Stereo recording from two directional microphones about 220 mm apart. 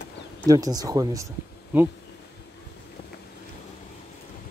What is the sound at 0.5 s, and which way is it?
Speech, 15° right (ahead or behind).